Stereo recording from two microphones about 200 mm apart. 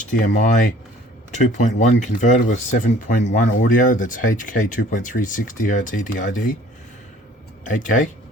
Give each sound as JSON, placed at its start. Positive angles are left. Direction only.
{"t": 0.0, "sound": "speech", "side_deg": 40}
{"t": 7.6, "sound": "speech", "side_deg": 40}